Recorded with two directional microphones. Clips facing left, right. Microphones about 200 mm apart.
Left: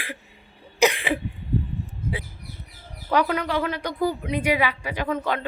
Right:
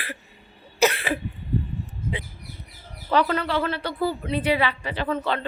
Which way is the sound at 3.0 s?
10° left (ahead or behind).